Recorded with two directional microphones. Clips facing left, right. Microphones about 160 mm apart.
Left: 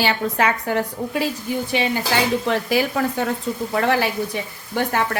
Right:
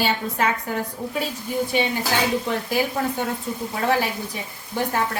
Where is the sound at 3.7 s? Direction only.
80° left.